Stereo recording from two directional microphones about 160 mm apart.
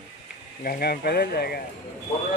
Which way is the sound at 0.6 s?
70° left (ahead or behind).